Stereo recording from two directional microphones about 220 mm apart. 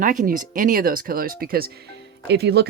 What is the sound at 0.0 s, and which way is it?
Speech, 35° right (ahead or behind).